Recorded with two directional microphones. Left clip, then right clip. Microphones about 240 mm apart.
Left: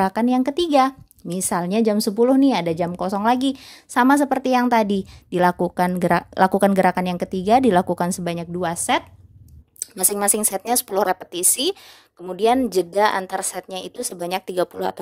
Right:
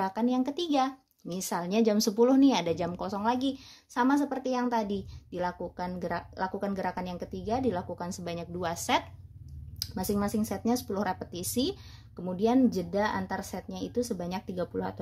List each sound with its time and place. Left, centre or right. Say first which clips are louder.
0.0 s a woman's voice: left 10 dB; left
9.9 s a woman's voice: left 9 dB; left